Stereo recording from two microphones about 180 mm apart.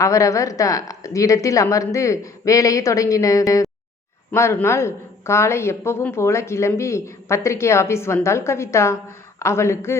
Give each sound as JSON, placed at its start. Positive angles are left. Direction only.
{"t": 0.0, "sound": "speech", "side_deg": 15}